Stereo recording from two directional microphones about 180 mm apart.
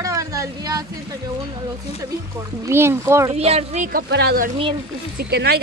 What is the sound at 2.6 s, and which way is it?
Speech, 15° right (ahead or behind).